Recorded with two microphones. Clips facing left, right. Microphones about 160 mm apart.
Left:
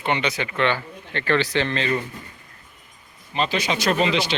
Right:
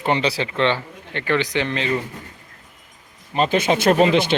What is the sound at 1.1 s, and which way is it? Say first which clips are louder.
Speech: even; 15° right (ahead or behind).